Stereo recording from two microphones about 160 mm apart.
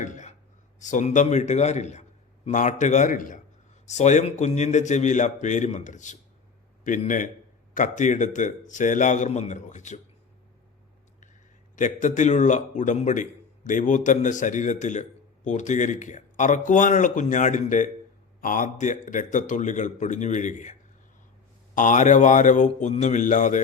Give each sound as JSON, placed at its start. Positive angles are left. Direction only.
{"t": 0.0, "sound": "a sound", "side_deg": 50}
{"t": 0.8, "sound": "a man's voice", "side_deg": 50}
{"t": 7.7, "sound": "a man's voice", "side_deg": 50}
{"t": 11.8, "sound": "a man's voice", "side_deg": 50}
{"t": 21.8, "sound": "a man's voice", "side_deg": 50}